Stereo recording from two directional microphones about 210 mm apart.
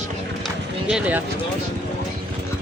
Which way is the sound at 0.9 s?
5° right (ahead or behind).